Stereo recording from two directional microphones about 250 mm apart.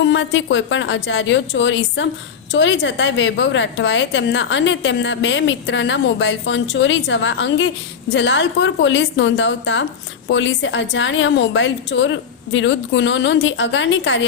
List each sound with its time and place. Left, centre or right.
0.0 s a woman's voice: left